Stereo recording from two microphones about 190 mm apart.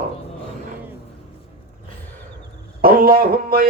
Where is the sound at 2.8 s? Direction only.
50° right (ahead or behind).